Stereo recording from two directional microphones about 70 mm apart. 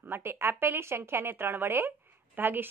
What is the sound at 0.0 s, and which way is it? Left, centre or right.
Speech, right.